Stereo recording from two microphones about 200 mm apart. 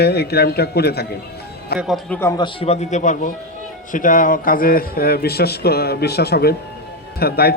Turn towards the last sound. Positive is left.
turn(degrees=50)  # may be behind; listen again after turning